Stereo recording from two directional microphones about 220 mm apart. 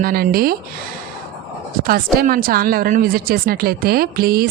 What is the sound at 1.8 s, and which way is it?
A woman's voice, 40° right (ahead or behind).